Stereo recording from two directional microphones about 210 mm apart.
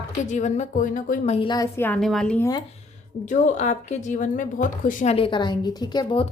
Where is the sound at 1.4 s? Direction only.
20° left (ahead or behind); by 2.5 s 5° left (ahead or behind).